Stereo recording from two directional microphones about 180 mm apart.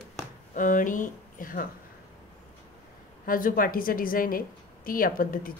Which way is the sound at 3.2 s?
50° left (ahead or behind).